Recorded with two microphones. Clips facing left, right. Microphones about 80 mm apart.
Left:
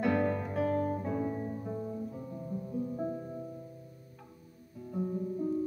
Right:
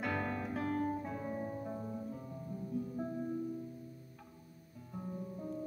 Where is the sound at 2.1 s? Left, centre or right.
Centre.